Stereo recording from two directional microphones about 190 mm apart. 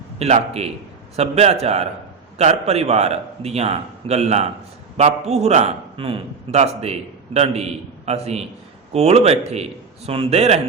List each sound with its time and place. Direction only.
0.2 s a man's voice: 35° right (ahead or behind)